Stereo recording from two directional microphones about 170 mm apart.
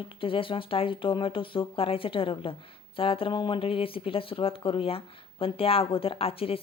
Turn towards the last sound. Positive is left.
turn(degrees=35)  # may be behind; listen again after turning